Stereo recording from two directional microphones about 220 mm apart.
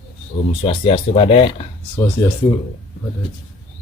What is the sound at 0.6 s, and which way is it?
Speech, 25° left (ahead or behind).